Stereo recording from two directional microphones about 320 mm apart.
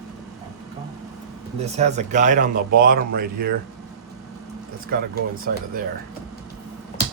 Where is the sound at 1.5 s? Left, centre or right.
Right.